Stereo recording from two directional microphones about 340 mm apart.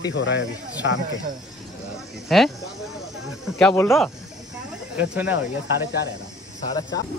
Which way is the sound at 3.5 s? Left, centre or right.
Centre.